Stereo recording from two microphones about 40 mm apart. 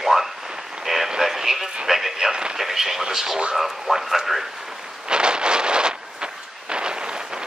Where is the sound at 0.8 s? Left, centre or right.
Centre.